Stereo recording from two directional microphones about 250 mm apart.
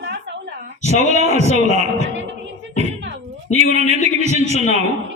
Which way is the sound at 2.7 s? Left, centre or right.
Right.